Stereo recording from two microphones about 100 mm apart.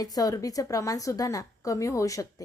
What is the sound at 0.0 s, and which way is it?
A woman's voice, 35° left (ahead or behind).